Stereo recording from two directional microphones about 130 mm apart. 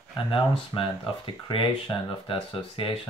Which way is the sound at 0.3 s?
40° left (ahead or behind).